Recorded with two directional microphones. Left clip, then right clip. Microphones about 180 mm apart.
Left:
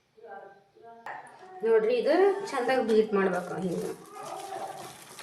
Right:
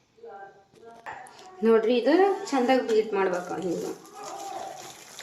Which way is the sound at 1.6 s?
65° right (ahead or behind).